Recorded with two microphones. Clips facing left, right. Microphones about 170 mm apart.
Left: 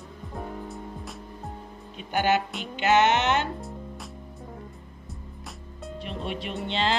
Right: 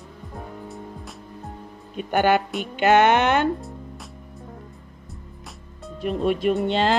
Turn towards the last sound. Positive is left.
turn(degrees=-50)  # may be behind; listen again after turning